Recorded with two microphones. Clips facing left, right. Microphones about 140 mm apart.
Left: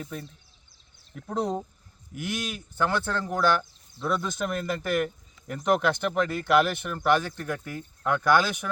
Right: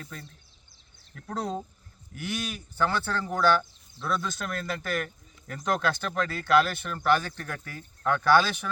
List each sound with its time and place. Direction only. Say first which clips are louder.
0.0 s speech: left 6 dB; 15° left (ahead or behind)